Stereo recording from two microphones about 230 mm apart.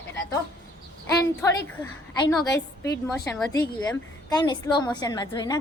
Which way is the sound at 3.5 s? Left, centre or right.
Centre.